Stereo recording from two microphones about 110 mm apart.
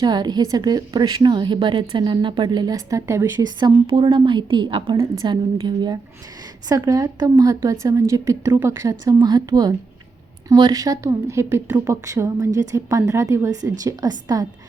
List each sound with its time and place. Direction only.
0.0 s a woman's voice: 40° right (ahead or behind)
3.4 s a woman's voice: 45° right (ahead or behind)